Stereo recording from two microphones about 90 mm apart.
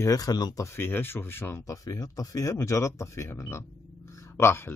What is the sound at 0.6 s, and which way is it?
Speech, 25° left (ahead or behind).